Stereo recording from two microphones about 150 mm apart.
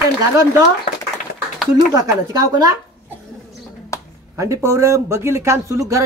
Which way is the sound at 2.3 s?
25° right (ahead or behind).